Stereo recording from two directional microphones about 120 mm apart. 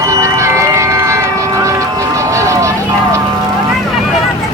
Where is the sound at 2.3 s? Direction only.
25° right (ahead or behind).